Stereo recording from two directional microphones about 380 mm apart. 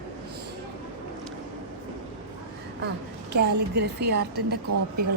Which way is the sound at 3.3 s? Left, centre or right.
Right.